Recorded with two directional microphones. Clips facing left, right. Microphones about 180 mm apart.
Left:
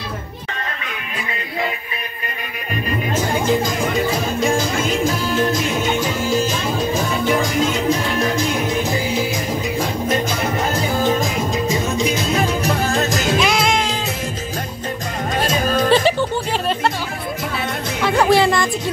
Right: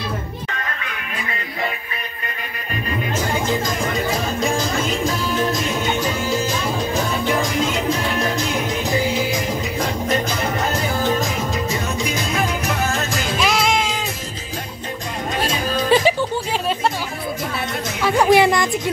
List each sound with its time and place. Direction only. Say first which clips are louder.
12.6 s music: left 4 dB; 40° left (ahead or behind)
13.4 s music: right 3 dB; centre (ahead or behind)
15.4 s music: left 5 dB; 50° left (ahead or behind)
15.9 s music: right 2 dB; 10° right (ahead or behind)
18.0 s speech: even; 10° right (ahead or behind)